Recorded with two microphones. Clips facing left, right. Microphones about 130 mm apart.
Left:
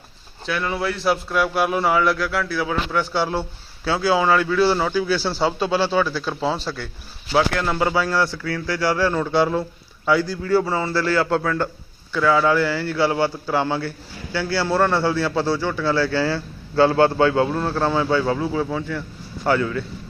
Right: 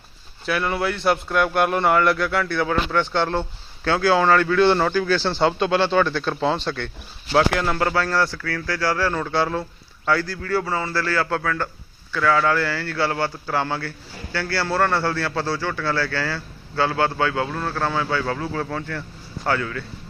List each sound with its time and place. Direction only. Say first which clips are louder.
0.4 s a man's voice: right 1 dB; centre (ahead or behind)
19.5 s a man's voice: left 4 dB; 20° left (ahead or behind)